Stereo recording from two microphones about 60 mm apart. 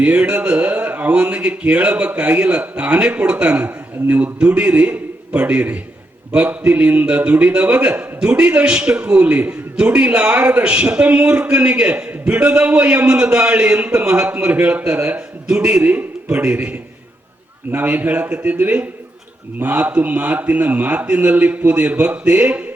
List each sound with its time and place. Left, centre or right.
0.0 s a man's voice: right
15.5 s a man's voice: centre
15.8 s a man's voice: right